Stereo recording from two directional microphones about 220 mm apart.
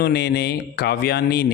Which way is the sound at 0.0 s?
45° left (ahead or behind).